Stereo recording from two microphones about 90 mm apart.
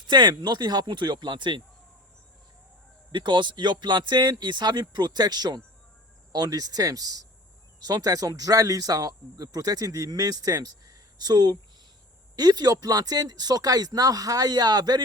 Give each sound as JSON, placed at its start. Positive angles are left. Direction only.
{"t": 0.1, "sound": "speech", "side_deg": -55}
{"t": 3.1, "sound": "speech", "side_deg": -60}